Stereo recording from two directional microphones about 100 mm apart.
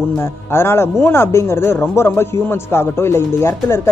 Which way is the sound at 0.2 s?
25° left (ahead or behind).